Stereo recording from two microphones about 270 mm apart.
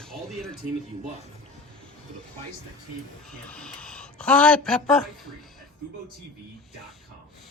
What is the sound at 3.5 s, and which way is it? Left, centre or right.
Speech, centre.